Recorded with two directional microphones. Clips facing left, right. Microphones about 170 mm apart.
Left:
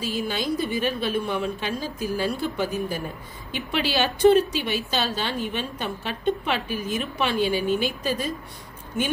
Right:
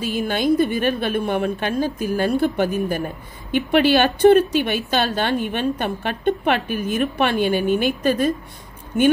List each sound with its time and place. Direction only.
0.0 s a woman's voice: 55° right (ahead or behind)